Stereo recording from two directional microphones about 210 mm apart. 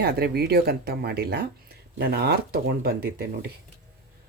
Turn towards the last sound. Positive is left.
turn(degrees=-45)  # may be behind; listen again after turning